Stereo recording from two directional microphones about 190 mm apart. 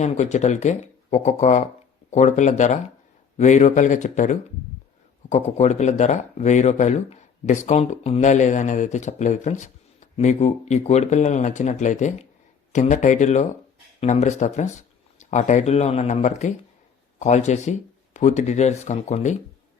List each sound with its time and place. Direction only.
0.0 s speech: 40° left (ahead or behind)